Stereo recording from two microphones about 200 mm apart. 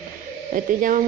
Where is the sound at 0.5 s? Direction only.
40° right (ahead or behind).